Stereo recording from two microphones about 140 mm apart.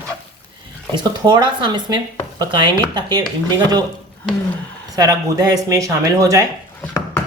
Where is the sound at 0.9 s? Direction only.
30° right (ahead or behind).